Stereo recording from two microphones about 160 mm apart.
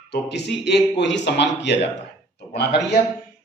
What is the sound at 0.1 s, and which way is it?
A man's voice, 90° left.